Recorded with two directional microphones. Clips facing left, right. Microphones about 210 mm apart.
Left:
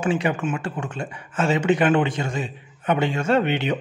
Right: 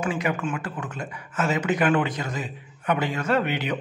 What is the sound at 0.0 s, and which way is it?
A man's voice, 30° left (ahead or behind).